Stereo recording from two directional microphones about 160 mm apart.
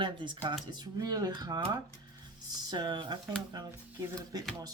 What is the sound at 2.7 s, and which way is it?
Speech, 30° right (ahead or behind).